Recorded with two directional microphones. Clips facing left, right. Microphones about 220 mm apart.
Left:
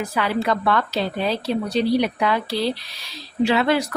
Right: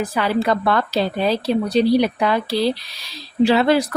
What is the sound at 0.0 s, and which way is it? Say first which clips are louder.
A woman's voice: right 3 dB; 35° right (ahead or behind).